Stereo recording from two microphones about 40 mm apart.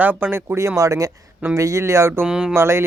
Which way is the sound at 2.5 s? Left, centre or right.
Right.